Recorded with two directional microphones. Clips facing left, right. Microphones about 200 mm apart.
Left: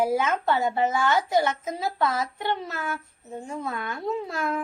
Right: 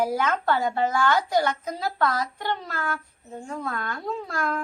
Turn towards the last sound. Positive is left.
turn(degrees=25)  # may be behind; listen again after turning